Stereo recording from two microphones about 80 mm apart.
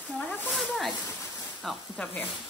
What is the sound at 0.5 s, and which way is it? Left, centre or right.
Snake, centre.